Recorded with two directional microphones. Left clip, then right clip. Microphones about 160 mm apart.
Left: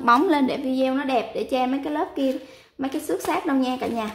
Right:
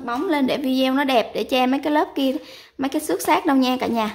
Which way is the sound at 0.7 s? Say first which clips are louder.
Right 3 dB; 30° right (ahead or behind).